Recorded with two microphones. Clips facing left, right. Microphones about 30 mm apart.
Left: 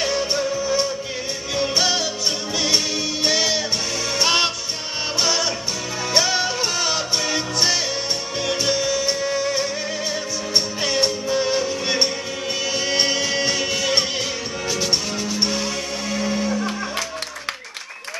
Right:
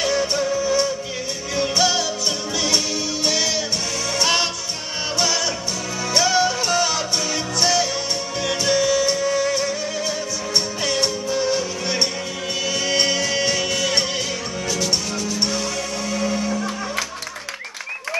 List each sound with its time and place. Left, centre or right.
0.1 s music: centre
8.4 s music: centre
9.1 s music: left
10.8 s music: centre